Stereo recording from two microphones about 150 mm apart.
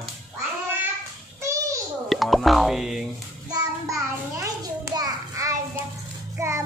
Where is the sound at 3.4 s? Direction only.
25° right (ahead or behind).